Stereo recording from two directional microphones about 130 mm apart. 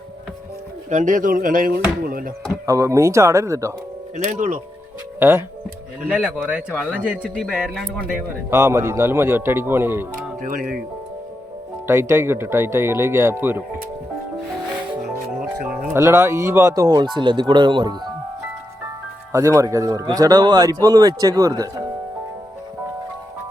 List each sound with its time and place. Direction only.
0.9 s speech: 75° right (ahead or behind); by 2.3 s 90° right
2.6 s speech: 25° right (ahead or behind)
4.2 s speech: 75° right (ahead or behind)
6.1 s speech: 10° right (ahead or behind)
7.3 s speech: 5° left (ahead or behind)
8.4 s speech: 20° right (ahead or behind)
10.4 s speech: 90° right
11.9 s speech: 20° right (ahead or behind)
15.9 s speech: 20° right (ahead or behind)
19.3 s speech: 25° right (ahead or behind)